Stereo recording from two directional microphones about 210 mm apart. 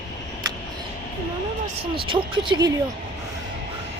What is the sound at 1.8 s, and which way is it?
Speech, 25° right (ahead or behind).